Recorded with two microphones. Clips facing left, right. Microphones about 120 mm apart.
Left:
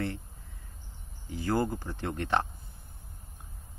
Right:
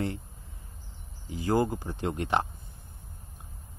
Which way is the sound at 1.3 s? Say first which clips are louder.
Right 3 dB; 15° right (ahead or behind).